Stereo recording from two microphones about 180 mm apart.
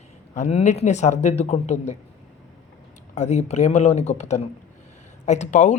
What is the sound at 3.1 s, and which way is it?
Speech, 40° left (ahead or behind).